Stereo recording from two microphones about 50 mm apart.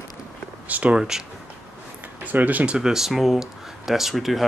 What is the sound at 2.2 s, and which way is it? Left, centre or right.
Speech, right.